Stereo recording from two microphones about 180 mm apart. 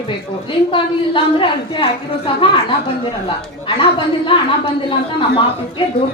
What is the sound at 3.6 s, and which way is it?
A woman's voice, 30° left (ahead or behind).